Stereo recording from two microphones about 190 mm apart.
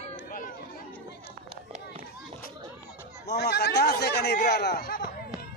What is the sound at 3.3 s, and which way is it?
Speech, 60° left (ahead or behind).